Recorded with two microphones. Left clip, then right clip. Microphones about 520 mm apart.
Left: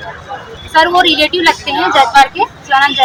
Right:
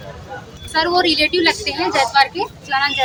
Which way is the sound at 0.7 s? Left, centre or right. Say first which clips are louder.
Left 7 dB; right.